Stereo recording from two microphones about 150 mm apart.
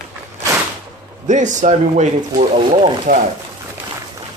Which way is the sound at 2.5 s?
35° right (ahead or behind).